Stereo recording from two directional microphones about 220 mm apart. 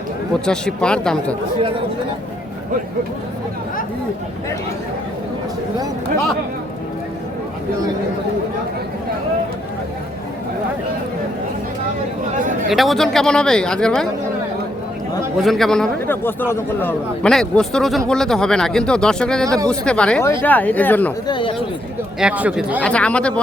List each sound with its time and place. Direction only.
0.4 s a man's voice: 5° left (ahead or behind)
12.6 s a man's voice: centre (ahead or behind)
15.4 s a man's voice: centre (ahead or behind)
21.2 s speech: 20° left (ahead or behind)
22.2 s speech: 5° right (ahead or behind)
22.8 s a man's voice: 5° left (ahead or behind)